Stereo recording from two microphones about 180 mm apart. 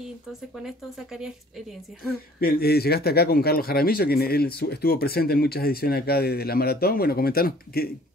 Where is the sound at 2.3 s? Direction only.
55° left (ahead or behind).